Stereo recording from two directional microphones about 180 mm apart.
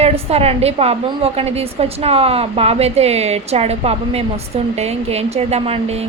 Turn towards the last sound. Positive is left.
turn(degrees=-35)  # may be behind; listen again after turning